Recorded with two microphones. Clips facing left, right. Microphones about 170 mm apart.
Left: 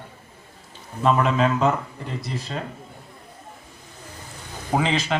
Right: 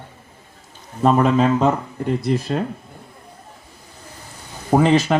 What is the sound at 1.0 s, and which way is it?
Speech, 40° right (ahead or behind).